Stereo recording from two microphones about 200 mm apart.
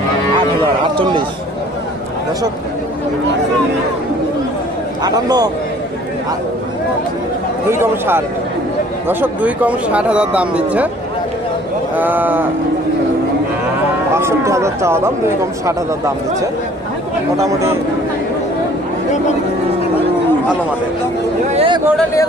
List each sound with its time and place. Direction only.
0.6 s speech: 25° right (ahead or behind)
5.0 s speech: 20° right (ahead or behind)
7.7 s speech: 10° right (ahead or behind)
12.0 s speech: 10° right (ahead or behind)
14.1 s speech: 15° right (ahead or behind)
17.4 s speech: 15° right (ahead or behind)
21.5 s chatter: 25° right (ahead or behind)